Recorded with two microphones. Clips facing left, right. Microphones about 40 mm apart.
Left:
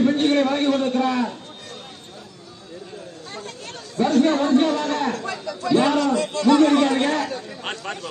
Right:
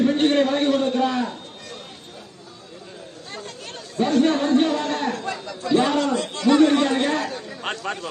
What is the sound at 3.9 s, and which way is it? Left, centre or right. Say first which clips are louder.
A man's voice: left 1 dB; right.